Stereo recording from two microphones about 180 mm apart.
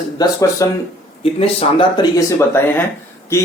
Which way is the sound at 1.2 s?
35° left (ahead or behind).